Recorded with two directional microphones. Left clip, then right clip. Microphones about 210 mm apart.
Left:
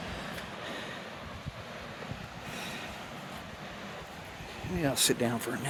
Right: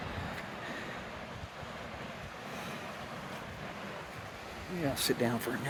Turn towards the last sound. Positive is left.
turn(degrees=25)  # may be behind; listen again after turning